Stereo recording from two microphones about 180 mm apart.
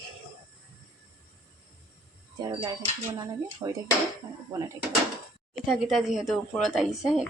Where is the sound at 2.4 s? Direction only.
25° right (ahead or behind).